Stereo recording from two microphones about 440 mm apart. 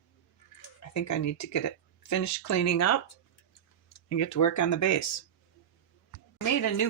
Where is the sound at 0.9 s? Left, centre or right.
Left.